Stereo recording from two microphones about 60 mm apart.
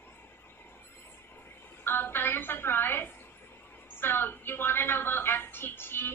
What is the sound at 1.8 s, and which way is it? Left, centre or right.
Speech, left.